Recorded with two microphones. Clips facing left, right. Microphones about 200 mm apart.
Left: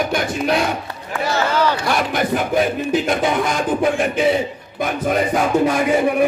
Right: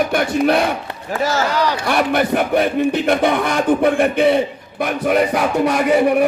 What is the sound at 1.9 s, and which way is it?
A man's voice, 60° right (ahead or behind).